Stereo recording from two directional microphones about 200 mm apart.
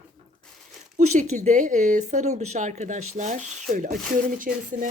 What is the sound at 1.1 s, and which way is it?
Speech, 35° right (ahead or behind).